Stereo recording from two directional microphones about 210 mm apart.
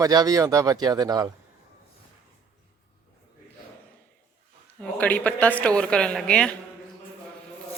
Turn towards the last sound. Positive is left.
turn(degrees=5)  # may be behind; listen again after turning